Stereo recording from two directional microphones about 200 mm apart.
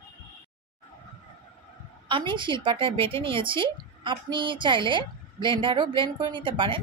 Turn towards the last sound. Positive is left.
turn(degrees=-25)  # may be behind; listen again after turning